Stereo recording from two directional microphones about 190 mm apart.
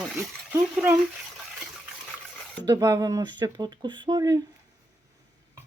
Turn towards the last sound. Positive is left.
turn(degrees=-20)  # may be behind; listen again after turning